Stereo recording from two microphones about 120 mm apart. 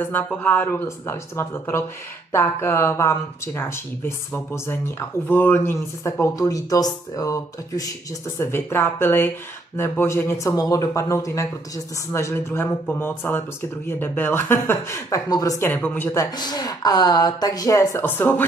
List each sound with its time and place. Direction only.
0.3 s speech: 15° left (ahead or behind)
15.7 s speech: 15° left (ahead or behind)
16.1 s speech: 30° left (ahead or behind)
18.0 s speech: 15° left (ahead or behind)